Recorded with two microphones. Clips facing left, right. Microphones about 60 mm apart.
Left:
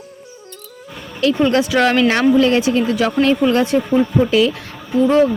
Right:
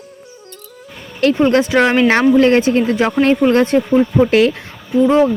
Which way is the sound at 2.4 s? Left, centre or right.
Right.